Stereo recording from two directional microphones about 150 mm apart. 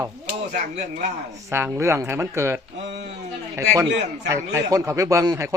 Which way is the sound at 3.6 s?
20° right (ahead or behind).